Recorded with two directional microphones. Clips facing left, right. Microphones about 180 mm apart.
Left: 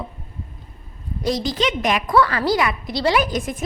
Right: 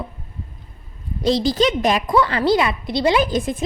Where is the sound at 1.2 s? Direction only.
30° right (ahead or behind).